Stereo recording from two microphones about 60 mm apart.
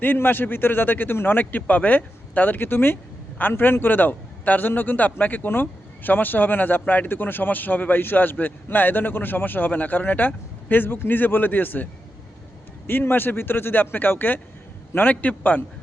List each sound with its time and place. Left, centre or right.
0.0 s a man's voice: left
12.9 s a man's voice: left